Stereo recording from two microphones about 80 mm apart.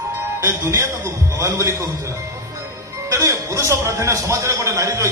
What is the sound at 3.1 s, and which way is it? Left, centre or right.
A man's voice, right.